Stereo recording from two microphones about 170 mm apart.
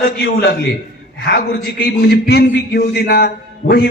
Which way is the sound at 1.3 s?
65° left (ahead or behind).